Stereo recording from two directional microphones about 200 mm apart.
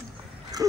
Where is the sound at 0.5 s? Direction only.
20° right (ahead or behind).